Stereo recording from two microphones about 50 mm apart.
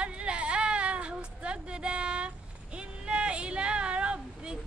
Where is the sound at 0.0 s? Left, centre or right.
Right.